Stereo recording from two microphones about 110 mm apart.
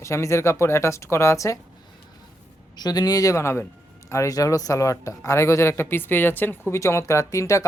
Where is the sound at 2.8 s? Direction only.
35° left (ahead or behind).